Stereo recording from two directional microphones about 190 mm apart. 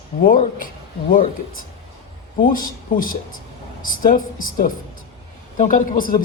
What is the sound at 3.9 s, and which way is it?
Speech, 45° left (ahead or behind).